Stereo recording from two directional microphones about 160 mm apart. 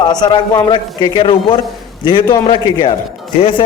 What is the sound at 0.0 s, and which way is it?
A man's voice, 25° left (ahead or behind).